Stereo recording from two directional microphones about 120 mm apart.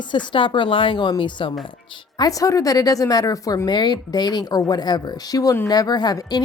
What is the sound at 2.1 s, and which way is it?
A woman's voice, 30° left (ahead or behind).